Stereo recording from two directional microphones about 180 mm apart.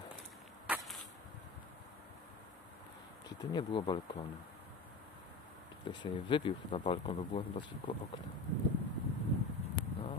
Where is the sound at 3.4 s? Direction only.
25° left (ahead or behind).